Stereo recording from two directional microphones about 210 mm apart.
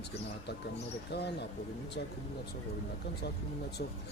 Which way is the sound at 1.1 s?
50° left (ahead or behind).